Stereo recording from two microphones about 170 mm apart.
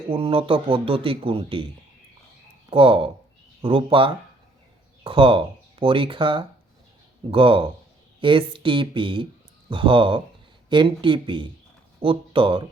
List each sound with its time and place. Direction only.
0.1 s speech: 30° right (ahead or behind)
2.6 s speech: 35° right (ahead or behind)